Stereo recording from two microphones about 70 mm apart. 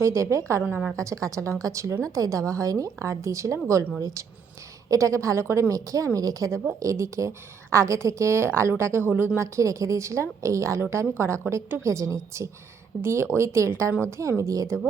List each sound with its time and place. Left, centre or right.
0.0 s a woman's voice: right
9.6 s a woman's voice: right